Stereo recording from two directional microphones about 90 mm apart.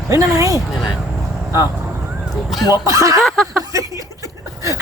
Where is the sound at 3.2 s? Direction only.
Centre (ahead or behind).